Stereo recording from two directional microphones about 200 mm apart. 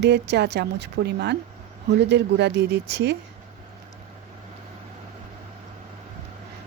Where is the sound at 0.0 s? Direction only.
60° right (ahead or behind).